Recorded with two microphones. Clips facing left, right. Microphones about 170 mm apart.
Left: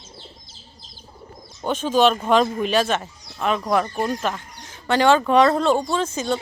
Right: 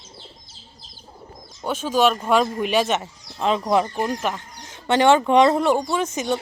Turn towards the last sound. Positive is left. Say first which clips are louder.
# even
turn(degrees=-20)  # may be behind; listen again after turning